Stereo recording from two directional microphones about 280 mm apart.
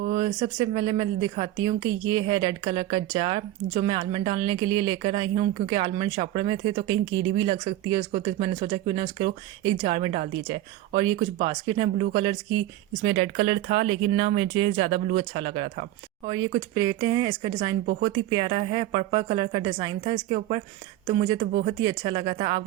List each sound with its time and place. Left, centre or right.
0.2 s speech: centre
21.8 s speech: centre